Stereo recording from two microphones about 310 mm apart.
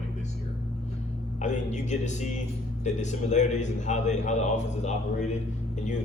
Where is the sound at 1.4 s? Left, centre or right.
Left.